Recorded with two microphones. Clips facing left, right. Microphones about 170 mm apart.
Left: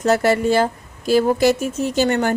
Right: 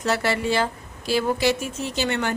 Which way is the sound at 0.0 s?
45° left (ahead or behind).